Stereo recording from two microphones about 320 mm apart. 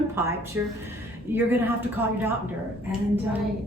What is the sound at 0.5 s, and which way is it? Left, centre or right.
A woman's voice, centre.